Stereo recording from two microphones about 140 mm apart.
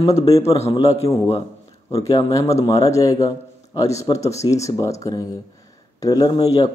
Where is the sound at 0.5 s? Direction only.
45° left (ahead or behind).